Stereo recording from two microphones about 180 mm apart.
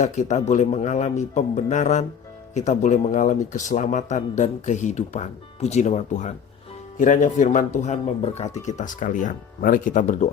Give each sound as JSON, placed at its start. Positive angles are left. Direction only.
{"t": 0.0, "sound": "a man's voice", "side_deg": 40}